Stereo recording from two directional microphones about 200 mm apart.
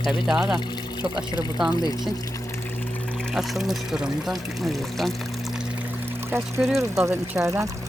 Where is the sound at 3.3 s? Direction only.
Centre (ahead or behind).